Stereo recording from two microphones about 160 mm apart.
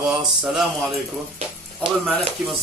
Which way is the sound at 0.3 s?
Centre (ahead or behind).